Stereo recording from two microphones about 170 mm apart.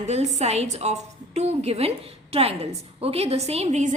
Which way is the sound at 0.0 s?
40° right (ahead or behind).